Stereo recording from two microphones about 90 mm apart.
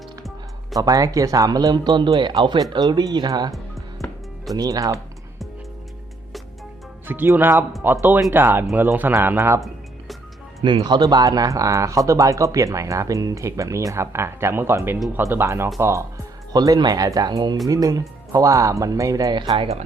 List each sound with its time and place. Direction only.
0.8 s speech: 40° right (ahead or behind)
3.5 s music: centre (ahead or behind)
4.5 s speech: 45° right (ahead or behind)
7.3 s speech: 25° right (ahead or behind)
10.8 s speech: 50° right (ahead or behind); by 16.0 s 30° right (ahead or behind)
16.5 s speech: 45° right (ahead or behind)
17.7 s speech: 40° right (ahead or behind)
19.3 s speech: 55° right (ahead or behind)